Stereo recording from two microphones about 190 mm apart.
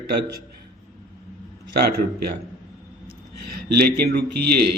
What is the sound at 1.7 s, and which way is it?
Speech, 55° right (ahead or behind).